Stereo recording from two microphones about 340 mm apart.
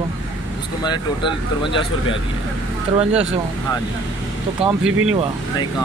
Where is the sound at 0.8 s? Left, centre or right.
Centre.